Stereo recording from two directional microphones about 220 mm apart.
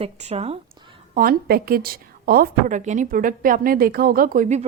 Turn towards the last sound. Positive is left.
turn(degrees=-35)  # may be behind; listen again after turning